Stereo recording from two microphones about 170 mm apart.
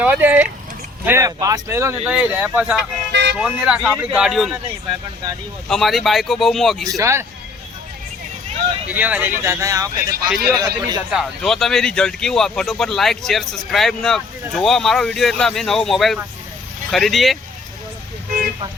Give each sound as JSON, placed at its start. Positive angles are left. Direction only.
{"t": 0.0, "sound": "speech", "side_deg": -10}
{"t": 3.1, "sound": "vehicle", "side_deg": -90}
{"t": 3.3, "sound": "speech", "side_deg": -5}
{"t": 5.6, "sound": "speech", "side_deg": 0}
{"t": 6.8, "sound": "speech", "side_deg": -20}
{"t": 8.9, "sound": "speech", "side_deg": -10}
{"t": 11.1, "sound": "speech", "side_deg": 0}
{"t": 18.3, "sound": "vehicle", "side_deg": -55}